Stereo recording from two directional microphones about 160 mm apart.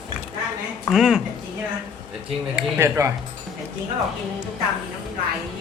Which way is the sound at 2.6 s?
15° right (ahead or behind).